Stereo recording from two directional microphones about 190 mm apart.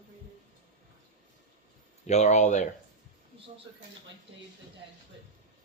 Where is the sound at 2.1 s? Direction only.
35° left (ahead or behind).